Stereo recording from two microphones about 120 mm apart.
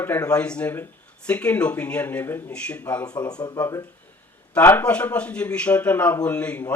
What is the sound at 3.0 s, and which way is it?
Speech, 35° left (ahead or behind).